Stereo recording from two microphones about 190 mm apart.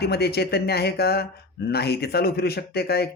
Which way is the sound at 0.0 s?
55° left (ahead or behind).